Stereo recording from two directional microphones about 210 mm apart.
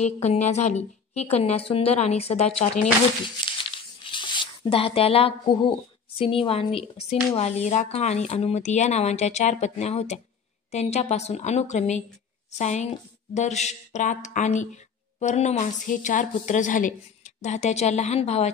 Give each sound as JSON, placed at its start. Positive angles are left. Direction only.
{"t": 0.0, "sound": "speech", "side_deg": 30}